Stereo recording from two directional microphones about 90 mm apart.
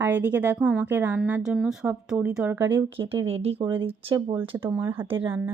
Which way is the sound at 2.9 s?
90° right.